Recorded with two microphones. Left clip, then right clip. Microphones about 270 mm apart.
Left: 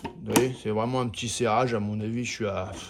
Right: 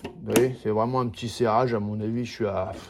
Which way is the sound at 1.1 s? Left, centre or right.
Centre.